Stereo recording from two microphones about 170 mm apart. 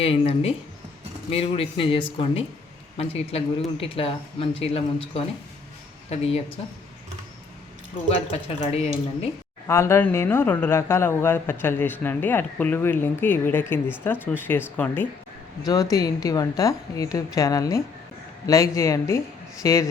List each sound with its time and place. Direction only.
0.0 s speech: 35° left (ahead or behind)
8.1 s speech: 35° left (ahead or behind)
9.6 s speech: 15° left (ahead or behind)
15.6 s a woman's voice: 20° left (ahead or behind)